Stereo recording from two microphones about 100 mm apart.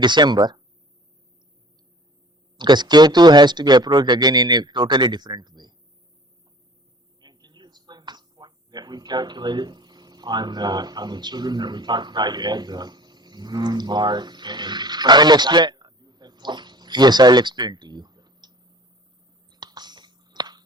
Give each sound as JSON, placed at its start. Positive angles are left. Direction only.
{"t": 0.0, "sound": "speech", "side_deg": -50}
{"t": 2.6, "sound": "speech", "side_deg": -45}
{"t": 7.2, "sound": "speech", "side_deg": -45}
{"t": 19.5, "sound": "a sound", "side_deg": -45}